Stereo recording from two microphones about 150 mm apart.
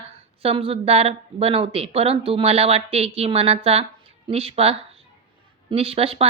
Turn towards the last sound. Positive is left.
turn(degrees=-40)  # may be behind; listen again after turning